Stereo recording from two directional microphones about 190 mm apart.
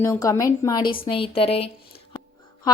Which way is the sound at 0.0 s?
15° left (ahead or behind).